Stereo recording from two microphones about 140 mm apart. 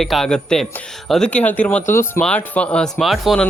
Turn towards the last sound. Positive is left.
turn(degrees=0)  # may be behind; listen again after turning